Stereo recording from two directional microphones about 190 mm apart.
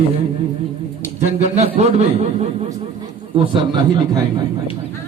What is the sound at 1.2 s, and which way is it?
A man's voice, 35° right (ahead or behind).